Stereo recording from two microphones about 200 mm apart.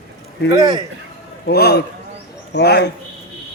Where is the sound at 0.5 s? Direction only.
20° right (ahead or behind).